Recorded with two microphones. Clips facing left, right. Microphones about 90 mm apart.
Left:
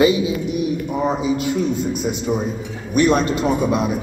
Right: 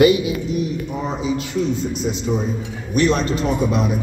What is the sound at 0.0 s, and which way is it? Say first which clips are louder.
Speech: right 2 dB; 25° left (ahead or behind).